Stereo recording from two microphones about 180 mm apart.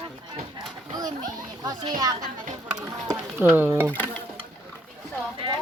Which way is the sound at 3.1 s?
10° right (ahead or behind).